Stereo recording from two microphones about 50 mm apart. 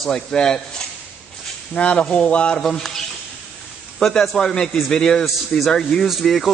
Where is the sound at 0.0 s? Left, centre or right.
Centre.